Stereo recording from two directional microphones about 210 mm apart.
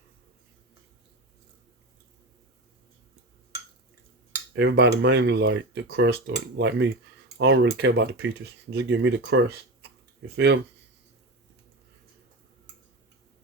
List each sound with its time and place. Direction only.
4.5 s speech: 55° right (ahead or behind)